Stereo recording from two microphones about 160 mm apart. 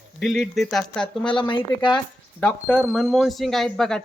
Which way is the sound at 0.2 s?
Centre (ahead or behind).